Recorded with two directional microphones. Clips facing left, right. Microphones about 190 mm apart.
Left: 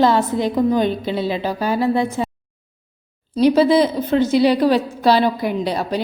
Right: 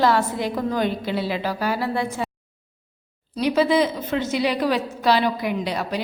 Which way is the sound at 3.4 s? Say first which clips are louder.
Left 6 dB; 35° left (ahead or behind).